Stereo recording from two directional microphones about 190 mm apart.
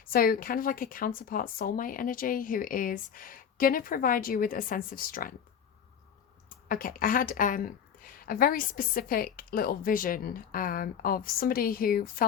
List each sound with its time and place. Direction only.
0.0 s speech: 50° left (ahead or behind)
6.5 s speech: 45° left (ahead or behind)